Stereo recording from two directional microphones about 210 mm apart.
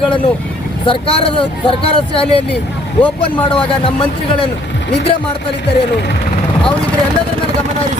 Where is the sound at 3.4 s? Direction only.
25° left (ahead or behind).